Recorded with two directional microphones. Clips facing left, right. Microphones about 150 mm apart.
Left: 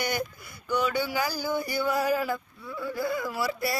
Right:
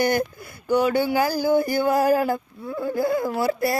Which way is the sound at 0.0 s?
55° right (ahead or behind).